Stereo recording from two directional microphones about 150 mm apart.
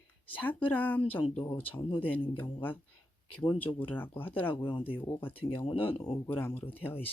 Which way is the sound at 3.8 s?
10° left (ahead or behind).